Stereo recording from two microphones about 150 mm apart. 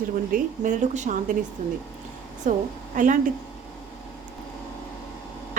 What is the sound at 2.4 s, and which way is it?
Speech, 60° right (ahead or behind).